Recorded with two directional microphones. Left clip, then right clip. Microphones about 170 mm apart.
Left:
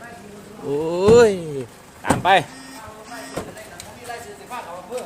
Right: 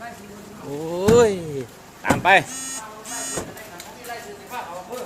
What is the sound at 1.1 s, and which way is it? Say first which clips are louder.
Speech: left 3 dB; 25° left (ahead or behind).